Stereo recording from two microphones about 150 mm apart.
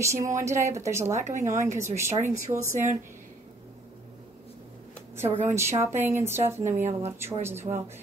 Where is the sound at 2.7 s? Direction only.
55° right (ahead or behind).